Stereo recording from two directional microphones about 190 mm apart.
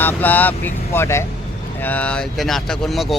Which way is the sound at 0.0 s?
10° left (ahead or behind).